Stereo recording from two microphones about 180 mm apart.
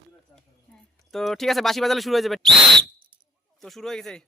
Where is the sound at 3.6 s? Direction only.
Centre (ahead or behind).